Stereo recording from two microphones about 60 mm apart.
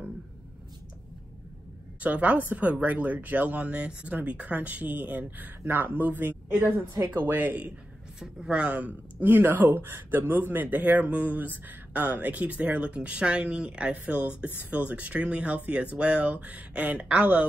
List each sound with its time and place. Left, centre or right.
2.0 s speech: right
8.2 s speech: centre
9.2 s speech: right